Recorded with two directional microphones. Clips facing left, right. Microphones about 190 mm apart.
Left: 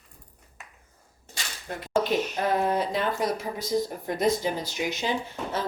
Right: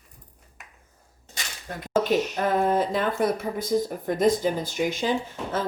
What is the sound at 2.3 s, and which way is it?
Speech, 50° right (ahead or behind).